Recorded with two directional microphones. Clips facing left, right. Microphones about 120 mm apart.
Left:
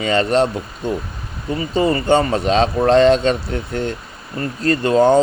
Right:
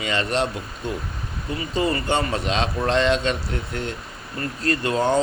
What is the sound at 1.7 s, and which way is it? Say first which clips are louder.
A man's voice: left 7 dB; 30° left (ahead or behind).